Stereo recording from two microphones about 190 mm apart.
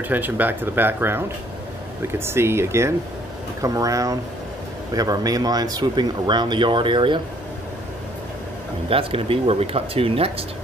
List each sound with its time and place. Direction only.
0.1 s speech: 10° right (ahead or behind); by 7.2 s 25° right (ahead or behind)
8.8 s speech: 30° right (ahead or behind)